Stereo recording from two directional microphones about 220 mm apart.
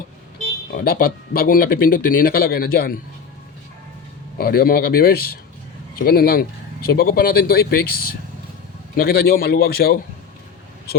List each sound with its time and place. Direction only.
0.7 s speech: 40° left (ahead or behind)
4.4 s speech: 40° left (ahead or behind)